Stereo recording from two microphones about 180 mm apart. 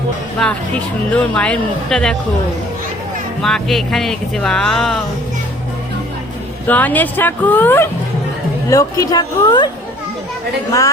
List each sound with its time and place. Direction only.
0.4 s speech: 5° left (ahead or behind)
3.4 s speech: centre (ahead or behind)
6.7 s speech: 10° left (ahead or behind)